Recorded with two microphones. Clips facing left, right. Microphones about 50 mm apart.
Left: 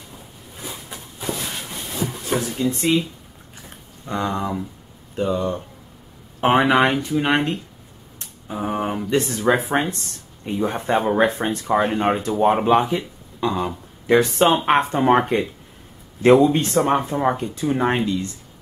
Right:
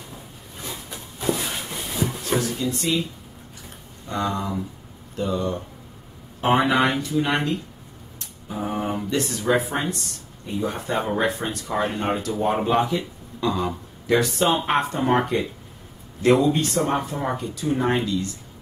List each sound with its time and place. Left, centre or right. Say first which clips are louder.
1.2 s a sound: right 3 dB; centre
2.3 s speech: left 3 dB; centre
4.1 s speech: left 2 dB; left